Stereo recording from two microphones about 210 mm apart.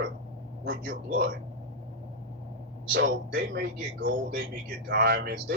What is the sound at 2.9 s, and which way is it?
A man's voice, 45° right (ahead or behind).